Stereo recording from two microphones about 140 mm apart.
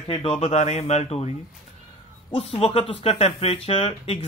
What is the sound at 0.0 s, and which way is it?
Speech, 40° left (ahead or behind).